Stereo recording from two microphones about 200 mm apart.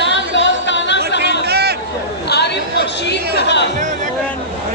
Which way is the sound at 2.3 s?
55° left (ahead or behind).